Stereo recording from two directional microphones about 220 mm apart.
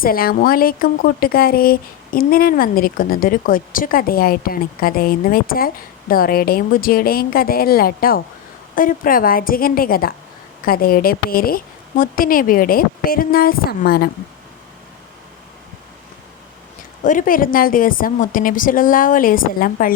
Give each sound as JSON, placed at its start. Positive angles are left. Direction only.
{"t": 0.0, "sound": "a woman's voice", "side_deg": 40}
{"t": 17.0, "sound": "a woman's voice", "side_deg": 35}